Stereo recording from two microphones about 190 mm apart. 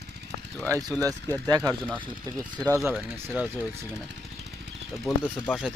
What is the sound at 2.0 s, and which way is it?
Speech, 20° right (ahead or behind).